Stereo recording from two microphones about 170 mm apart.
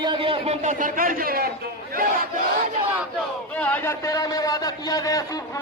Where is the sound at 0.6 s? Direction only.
50° right (ahead or behind).